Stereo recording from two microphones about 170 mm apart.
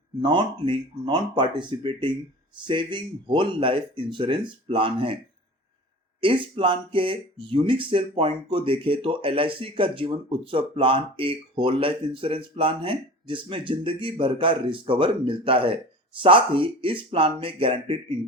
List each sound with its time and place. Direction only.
0.2 s speech: 30° right (ahead or behind)
6.1 s speech: 30° right (ahead or behind)